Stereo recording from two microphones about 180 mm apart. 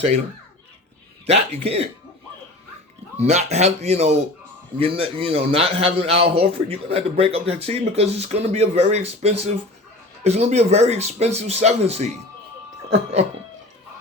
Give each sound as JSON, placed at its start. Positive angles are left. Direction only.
{"t": 1.3, "sound": "a man's voice", "side_deg": -35}
{"t": 3.2, "sound": "a man's voice", "side_deg": -40}